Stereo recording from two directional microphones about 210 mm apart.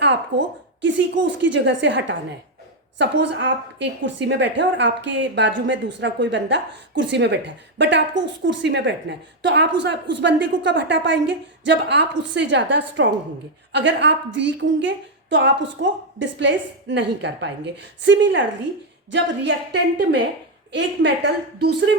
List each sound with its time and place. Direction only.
0.0 s a woman's voice: 60° right (ahead or behind)